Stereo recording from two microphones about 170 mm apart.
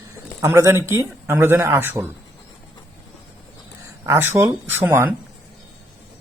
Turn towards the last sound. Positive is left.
turn(degrees=-10)  # may be behind; listen again after turning